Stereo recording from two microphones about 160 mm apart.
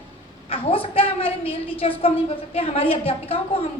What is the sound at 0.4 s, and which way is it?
A woman's voice, 35° left (ahead or behind).